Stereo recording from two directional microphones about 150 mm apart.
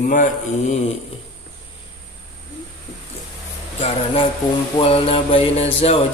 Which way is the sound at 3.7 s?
40° left (ahead or behind).